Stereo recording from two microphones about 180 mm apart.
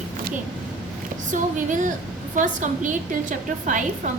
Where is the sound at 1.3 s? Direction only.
45° right (ahead or behind).